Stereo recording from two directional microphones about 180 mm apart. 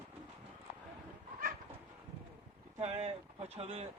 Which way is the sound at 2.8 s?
35° right (ahead or behind).